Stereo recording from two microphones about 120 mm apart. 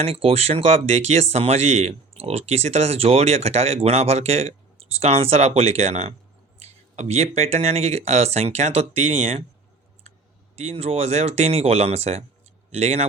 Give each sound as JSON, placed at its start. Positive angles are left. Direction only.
{"t": 0.0, "sound": "speech", "side_deg": -55}
{"t": 10.5, "sound": "speech", "side_deg": -60}